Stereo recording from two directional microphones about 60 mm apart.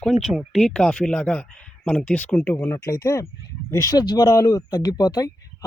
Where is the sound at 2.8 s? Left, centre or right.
Left.